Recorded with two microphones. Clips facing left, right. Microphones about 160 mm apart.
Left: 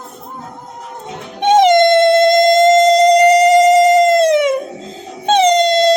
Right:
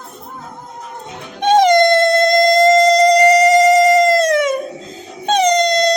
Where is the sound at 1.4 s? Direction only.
20° left (ahead or behind).